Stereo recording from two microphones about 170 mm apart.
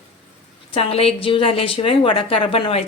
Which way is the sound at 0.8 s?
35° left (ahead or behind).